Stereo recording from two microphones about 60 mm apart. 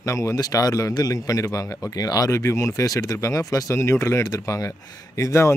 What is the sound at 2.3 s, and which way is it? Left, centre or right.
A man's voice, left.